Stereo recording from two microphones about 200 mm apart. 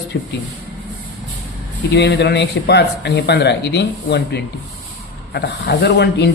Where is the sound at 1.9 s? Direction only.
55° left (ahead or behind).